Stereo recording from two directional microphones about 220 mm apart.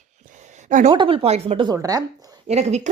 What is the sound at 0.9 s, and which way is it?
Speech, 25° right (ahead or behind).